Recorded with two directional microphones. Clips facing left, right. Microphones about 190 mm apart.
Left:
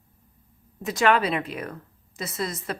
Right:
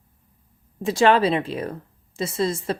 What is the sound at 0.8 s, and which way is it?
Speech, 30° right (ahead or behind).